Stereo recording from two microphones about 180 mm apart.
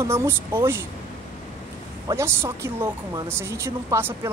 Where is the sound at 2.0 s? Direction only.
15° right (ahead or behind).